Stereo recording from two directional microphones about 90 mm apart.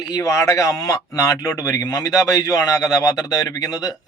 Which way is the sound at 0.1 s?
40° left (ahead or behind).